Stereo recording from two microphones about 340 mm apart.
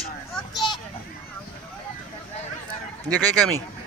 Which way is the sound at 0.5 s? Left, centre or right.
Centre.